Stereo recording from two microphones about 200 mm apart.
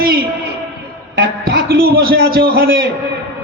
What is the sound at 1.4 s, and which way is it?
A man's voice, 50° right (ahead or behind).